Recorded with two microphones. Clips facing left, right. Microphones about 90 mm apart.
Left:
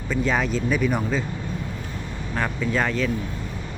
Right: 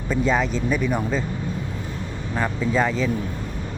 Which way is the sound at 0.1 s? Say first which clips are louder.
Right 2 dB; centre (ahead or behind).